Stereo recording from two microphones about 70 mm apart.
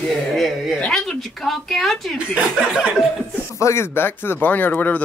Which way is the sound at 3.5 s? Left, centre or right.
Left.